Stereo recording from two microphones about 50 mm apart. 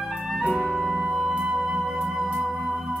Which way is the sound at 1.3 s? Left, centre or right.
Right.